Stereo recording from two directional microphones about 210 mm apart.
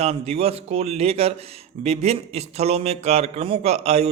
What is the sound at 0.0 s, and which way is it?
Speech, 30° right (ahead or behind).